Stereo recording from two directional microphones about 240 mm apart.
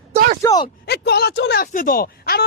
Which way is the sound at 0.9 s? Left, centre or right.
Left.